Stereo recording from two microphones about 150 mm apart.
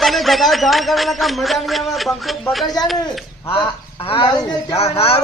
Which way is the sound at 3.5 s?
40° left (ahead or behind).